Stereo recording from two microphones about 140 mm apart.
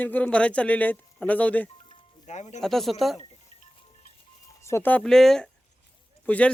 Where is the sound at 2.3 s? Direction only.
55° left (ahead or behind).